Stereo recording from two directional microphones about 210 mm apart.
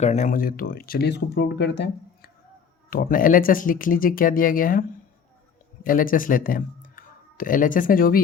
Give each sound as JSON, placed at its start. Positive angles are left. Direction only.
{"t": 0.0, "sound": "speech", "side_deg": 35}
{"t": 2.9, "sound": "speech", "side_deg": 45}